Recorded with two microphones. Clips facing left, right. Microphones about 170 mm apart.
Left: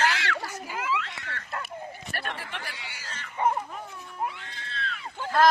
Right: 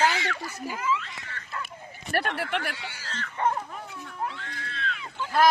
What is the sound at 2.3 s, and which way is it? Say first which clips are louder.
Speech: right 9 dB; 70° right (ahead or behind).